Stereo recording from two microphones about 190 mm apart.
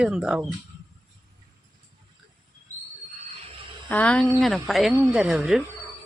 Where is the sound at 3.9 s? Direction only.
5° left (ahead or behind).